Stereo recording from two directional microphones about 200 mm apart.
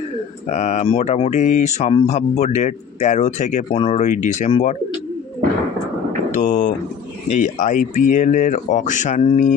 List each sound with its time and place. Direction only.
0.5 s speech: 35° left (ahead or behind)
6.3 s speech: 40° left (ahead or behind)